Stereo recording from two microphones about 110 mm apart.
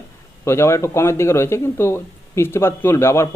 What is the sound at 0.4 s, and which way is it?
Speech, 25° left (ahead or behind).